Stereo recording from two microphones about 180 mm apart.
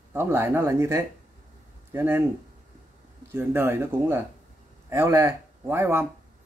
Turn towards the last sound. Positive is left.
turn(degrees=-15)  # may be behind; listen again after turning